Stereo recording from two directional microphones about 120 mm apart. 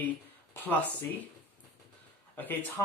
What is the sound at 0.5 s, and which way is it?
Speech, 15° left (ahead or behind).